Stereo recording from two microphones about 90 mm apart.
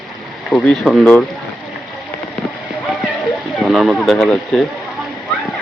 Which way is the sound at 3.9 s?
5° left (ahead or behind).